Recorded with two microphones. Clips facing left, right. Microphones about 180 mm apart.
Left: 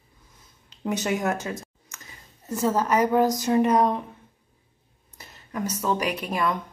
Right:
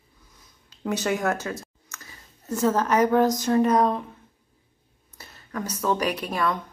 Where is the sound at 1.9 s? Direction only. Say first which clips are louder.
Right 1 dB; 15° left (ahead or behind).